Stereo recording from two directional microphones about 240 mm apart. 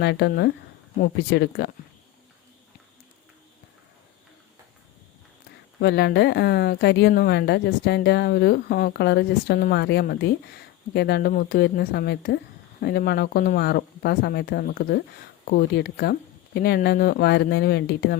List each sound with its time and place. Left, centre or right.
0.0 s speech: left
5.8 s speech: left